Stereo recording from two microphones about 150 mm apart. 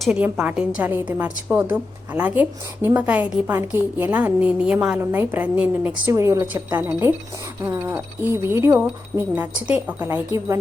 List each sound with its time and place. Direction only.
0.0 s a woman's voice: 5° right (ahead or behind)